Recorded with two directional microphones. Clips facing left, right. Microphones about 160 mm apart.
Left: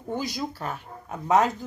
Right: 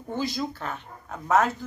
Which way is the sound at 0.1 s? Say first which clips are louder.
Right 1 dB; 15° left (ahead or behind).